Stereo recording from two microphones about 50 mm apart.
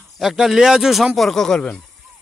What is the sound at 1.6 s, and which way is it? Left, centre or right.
Speech, centre.